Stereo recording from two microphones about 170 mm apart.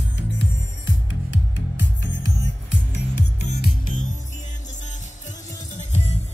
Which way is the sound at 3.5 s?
50° left (ahead or behind).